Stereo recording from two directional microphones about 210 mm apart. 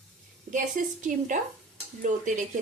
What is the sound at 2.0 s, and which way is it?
Speech, 35° right (ahead or behind).